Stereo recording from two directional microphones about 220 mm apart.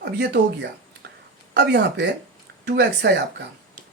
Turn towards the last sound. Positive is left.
turn(degrees=-50)  # may be behind; listen again after turning